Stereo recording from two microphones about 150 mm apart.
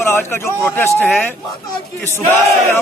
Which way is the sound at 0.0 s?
15° left (ahead or behind).